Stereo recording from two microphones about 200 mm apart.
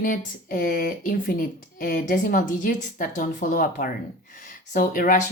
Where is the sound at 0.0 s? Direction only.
45° left (ahead or behind).